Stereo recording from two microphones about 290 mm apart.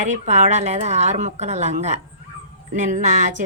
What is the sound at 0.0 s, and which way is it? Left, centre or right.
A woman's voice, right.